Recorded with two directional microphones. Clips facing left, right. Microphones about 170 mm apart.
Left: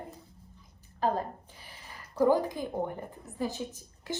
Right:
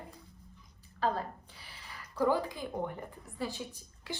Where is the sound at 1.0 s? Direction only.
45° left (ahead or behind).